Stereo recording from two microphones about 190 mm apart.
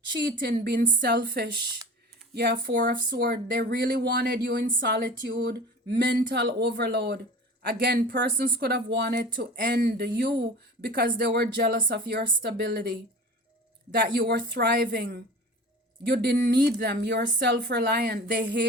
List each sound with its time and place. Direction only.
0.4 s speech: 60° right (ahead or behind)